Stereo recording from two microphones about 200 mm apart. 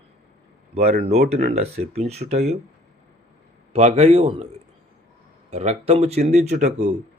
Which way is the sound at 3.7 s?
35° right (ahead or behind).